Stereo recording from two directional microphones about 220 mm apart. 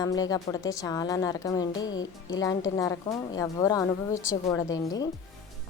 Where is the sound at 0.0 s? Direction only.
15° left (ahead or behind).